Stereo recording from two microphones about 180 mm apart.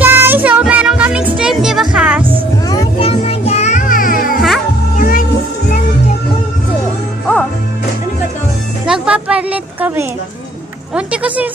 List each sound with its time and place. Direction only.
0.0 s music: 10° right (ahead or behind)
3.0 s music: 35° left (ahead or behind); by 5.2 s 50° left (ahead or behind)
8.9 s a sound: 5° right (ahead or behind)
10.9 s speech: 5° right (ahead or behind)